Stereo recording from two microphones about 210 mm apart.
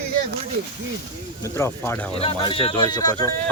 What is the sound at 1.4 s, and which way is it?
Speech, 15° left (ahead or behind).